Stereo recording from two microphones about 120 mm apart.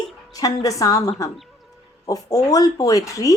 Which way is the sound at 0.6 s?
30° left (ahead or behind).